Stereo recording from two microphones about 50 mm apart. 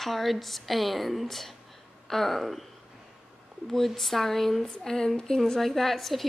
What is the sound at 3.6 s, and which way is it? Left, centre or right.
A woman's voice, centre.